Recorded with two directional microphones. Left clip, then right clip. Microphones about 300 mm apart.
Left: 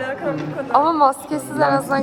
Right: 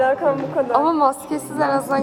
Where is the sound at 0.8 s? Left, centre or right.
Centre.